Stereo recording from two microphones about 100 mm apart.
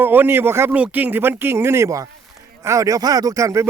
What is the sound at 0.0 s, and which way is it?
Speech, 20° right (ahead or behind).